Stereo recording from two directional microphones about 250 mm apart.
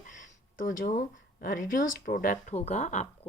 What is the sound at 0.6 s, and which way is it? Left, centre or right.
Speech, left.